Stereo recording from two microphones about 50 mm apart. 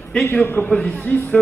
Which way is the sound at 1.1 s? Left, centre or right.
Left.